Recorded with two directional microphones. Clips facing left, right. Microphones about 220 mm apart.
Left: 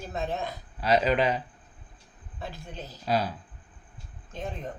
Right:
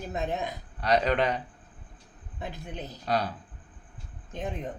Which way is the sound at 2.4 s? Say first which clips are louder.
Right 2 dB; 15° right (ahead or behind).